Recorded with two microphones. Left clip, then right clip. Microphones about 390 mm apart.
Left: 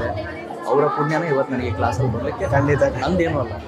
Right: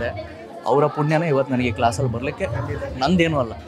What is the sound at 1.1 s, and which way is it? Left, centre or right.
Speech, right.